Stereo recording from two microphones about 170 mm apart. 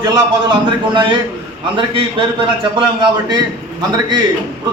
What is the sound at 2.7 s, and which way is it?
Speech, 25° right (ahead or behind).